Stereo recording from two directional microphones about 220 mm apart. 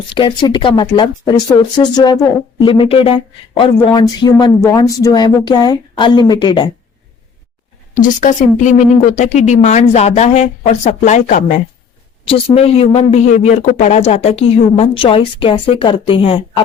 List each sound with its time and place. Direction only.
0.1 s speech: 20° left (ahead or behind)
7.9 s a woman's voice: 35° left (ahead or behind)